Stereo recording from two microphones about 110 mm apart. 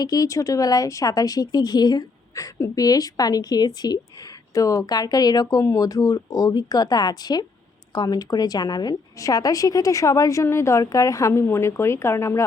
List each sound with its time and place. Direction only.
0.0 s a woman's voice: 30° left (ahead or behind)